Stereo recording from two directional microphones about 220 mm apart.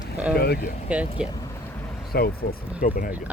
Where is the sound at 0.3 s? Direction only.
45° left (ahead or behind).